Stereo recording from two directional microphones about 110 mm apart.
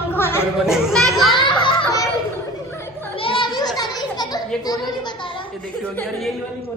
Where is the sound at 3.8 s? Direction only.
40° left (ahead or behind).